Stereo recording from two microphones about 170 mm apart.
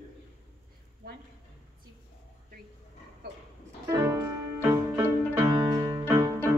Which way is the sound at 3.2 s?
75° right (ahead or behind).